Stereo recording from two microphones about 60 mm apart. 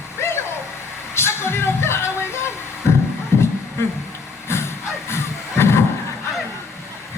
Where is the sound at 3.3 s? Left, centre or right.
Left.